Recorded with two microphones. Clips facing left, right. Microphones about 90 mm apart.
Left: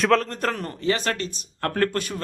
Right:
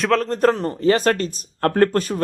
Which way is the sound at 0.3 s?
35° right (ahead or behind).